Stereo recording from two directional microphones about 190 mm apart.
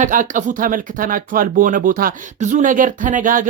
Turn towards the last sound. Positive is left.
turn(degrees=-45)  # may be behind; listen again after turning